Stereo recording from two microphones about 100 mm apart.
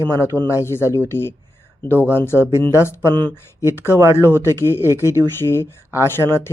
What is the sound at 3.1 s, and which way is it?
Speech, 50° right (ahead or behind).